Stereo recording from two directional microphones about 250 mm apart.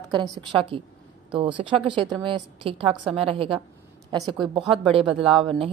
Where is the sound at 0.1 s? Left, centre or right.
Centre.